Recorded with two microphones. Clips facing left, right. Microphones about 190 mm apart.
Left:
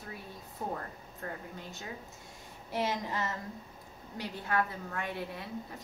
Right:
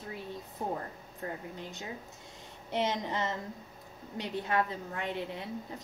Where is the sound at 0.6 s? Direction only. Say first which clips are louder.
Right 2 dB; 20° right (ahead or behind).